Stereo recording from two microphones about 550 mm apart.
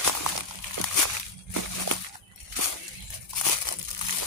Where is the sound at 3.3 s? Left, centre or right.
Left.